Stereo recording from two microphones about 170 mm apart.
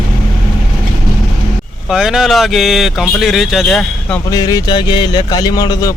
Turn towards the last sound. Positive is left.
turn(degrees=25)  # may be behind; listen again after turning